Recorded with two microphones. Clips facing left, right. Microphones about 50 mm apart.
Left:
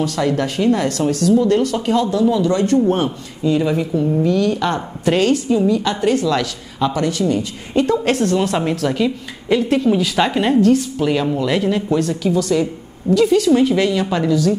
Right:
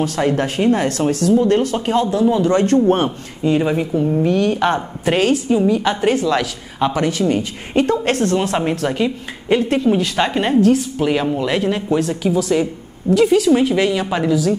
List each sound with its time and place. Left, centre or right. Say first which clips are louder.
0.0 s speech: right 1 dB; right
2.5 s a woman's voice: right 2 dB; right
4.7 s a woman's voice: even; centre
6.8 s speech: right 1 dB; right
7.8 s a woman's voice: left 1 dB; centre
9.7 s a woman's voice: even; centre